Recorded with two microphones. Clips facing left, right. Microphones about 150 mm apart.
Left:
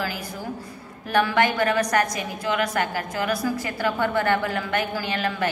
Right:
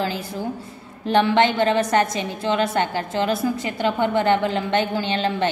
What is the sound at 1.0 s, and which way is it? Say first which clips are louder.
A woman's voice: right 4 dB; 25° right (ahead or behind).